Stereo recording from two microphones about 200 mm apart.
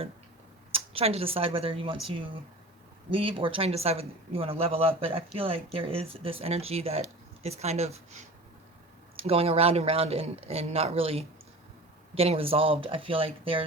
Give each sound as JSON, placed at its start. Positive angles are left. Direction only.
{"t": 0.7, "sound": "speech", "side_deg": -30}
{"t": 3.1, "sound": "speech", "side_deg": -25}